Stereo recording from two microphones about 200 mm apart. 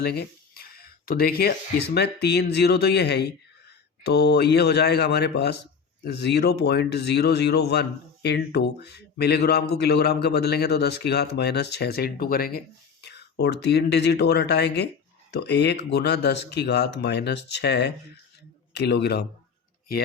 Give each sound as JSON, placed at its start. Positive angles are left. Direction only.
{"t": 0.0, "sound": "a man's voice", "side_deg": 55}